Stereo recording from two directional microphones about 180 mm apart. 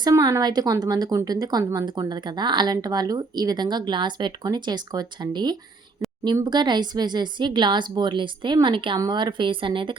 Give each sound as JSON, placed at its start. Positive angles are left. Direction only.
{"t": 0.0, "sound": "speech", "side_deg": -20}